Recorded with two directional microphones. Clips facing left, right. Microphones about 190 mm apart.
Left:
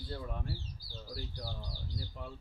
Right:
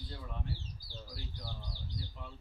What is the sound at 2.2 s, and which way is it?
Speech, 45° left (ahead or behind).